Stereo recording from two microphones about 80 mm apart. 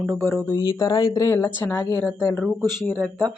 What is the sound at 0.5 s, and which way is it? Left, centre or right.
Speech, left.